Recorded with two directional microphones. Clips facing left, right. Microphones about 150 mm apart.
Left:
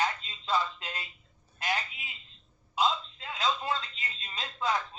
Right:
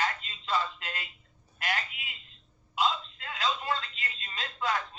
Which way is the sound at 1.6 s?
20° left (ahead or behind).